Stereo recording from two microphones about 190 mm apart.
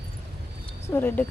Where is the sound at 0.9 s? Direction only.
10° left (ahead or behind).